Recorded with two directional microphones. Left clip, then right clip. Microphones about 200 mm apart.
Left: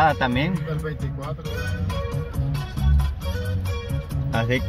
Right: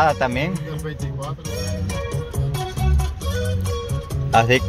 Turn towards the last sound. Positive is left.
turn(degrees=-40)  # may be behind; listen again after turning